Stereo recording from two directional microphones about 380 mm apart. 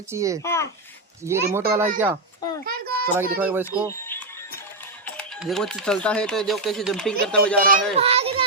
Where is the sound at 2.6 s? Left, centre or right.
Right.